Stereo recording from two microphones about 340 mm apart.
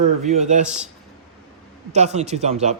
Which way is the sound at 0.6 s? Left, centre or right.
Centre.